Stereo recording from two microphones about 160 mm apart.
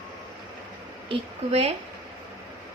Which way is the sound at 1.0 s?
40° right (ahead or behind).